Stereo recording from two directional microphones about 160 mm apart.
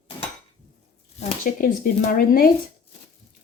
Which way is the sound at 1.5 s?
60° left (ahead or behind).